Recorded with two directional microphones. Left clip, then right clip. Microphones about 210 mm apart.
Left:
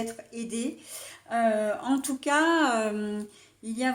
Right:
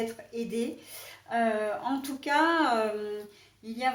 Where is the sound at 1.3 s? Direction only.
45° left (ahead or behind).